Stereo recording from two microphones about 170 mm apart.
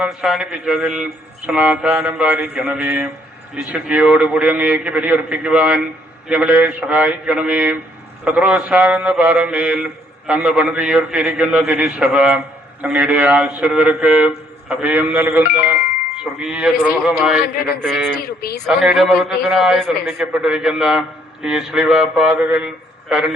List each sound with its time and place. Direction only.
0.0 s a man's voice: 5° right (ahead or behind)
18.2 s speech: 65° left (ahead or behind)
18.6 s a man's voice: centre (ahead or behind)